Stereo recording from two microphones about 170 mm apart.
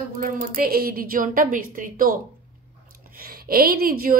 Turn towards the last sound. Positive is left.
turn(degrees=-60)  # may be behind; listen again after turning